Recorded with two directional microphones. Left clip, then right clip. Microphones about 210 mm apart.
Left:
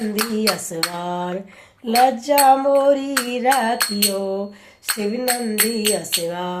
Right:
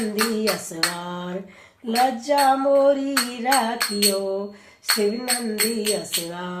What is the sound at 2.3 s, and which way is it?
Speech, 35° left (ahead or behind).